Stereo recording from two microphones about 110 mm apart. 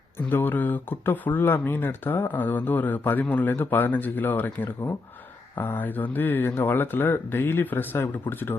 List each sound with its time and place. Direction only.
0.3 s speech: 20° left (ahead or behind)